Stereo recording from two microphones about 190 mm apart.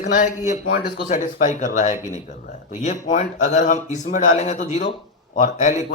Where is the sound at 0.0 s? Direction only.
40° left (ahead or behind).